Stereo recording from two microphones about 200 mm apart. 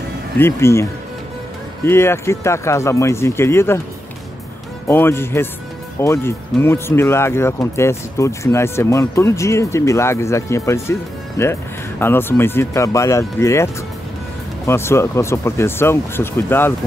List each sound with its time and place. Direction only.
0.4 s speech: 15° left (ahead or behind)
1.9 s speech: 10° left (ahead or behind)
4.8 s speech: 10° left (ahead or behind)
14.7 s speech: 15° left (ahead or behind)